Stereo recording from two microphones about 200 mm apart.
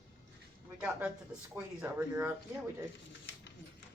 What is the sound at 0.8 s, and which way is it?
Speech, 5° right (ahead or behind).